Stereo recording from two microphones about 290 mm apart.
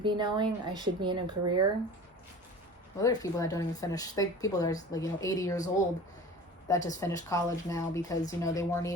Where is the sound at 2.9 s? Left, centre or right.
Centre.